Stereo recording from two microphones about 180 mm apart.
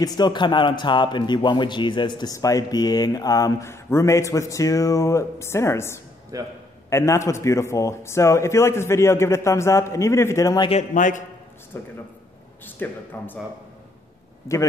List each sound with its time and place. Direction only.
0.0 s speech: 20° left (ahead or behind)
6.3 s a man's voice: 20° right (ahead or behind)
6.9 s a man's voice: 15° left (ahead or behind)
10.7 s a man's voice: 45° left (ahead or behind)
11.7 s a man's voice: 15° left (ahead or behind)